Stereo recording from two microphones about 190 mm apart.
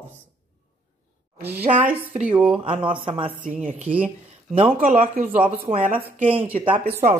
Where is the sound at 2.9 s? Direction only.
25° right (ahead or behind).